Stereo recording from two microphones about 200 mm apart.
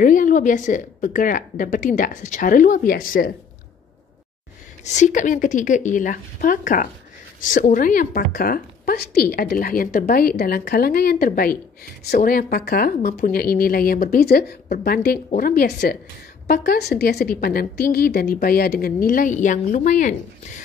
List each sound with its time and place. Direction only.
0.0 s a woman's voice: 40° left (ahead or behind)
4.8 s a woman's voice: 35° left (ahead or behind)